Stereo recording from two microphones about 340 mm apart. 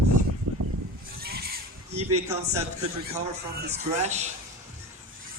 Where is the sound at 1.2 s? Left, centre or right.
Right.